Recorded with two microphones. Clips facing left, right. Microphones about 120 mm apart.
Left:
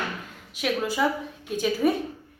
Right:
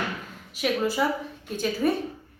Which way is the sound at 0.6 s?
Centre (ahead or behind).